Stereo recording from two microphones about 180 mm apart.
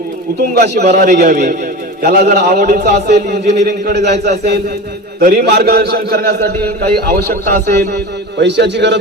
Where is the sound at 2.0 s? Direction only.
60° right (ahead or behind).